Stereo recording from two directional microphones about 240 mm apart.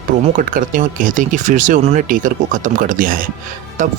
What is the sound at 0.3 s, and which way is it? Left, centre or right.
Speech, right.